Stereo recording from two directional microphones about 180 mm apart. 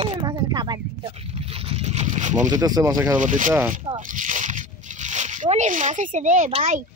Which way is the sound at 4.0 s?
45° right (ahead or behind).